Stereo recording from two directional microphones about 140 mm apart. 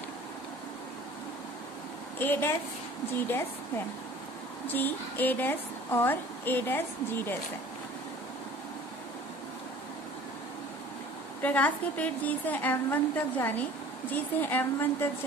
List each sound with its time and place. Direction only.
2.1 s a woman's voice: 15° left (ahead or behind)
11.4 s a woman's voice: 10° left (ahead or behind)